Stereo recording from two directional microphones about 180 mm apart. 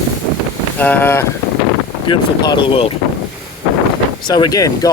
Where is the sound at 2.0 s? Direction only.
25° left (ahead or behind).